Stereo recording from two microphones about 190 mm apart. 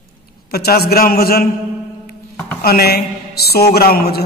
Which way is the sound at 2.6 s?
55° left (ahead or behind).